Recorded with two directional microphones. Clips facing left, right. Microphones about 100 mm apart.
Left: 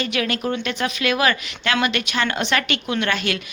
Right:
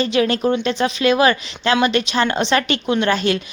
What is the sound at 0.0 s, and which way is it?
Speech, 30° right (ahead or behind).